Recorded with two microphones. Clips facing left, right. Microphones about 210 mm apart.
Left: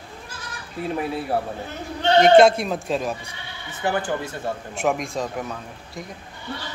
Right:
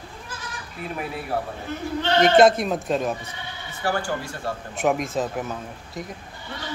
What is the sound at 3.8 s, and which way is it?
Speech, 20° left (ahead or behind).